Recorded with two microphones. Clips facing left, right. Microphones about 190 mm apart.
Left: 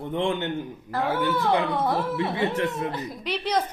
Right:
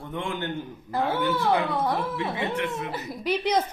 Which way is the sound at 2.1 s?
35° left (ahead or behind).